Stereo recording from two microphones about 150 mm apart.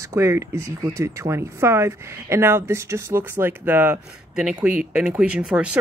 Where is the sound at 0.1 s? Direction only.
20° right (ahead or behind).